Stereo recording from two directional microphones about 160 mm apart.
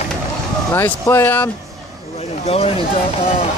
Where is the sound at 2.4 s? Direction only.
35° left (ahead or behind).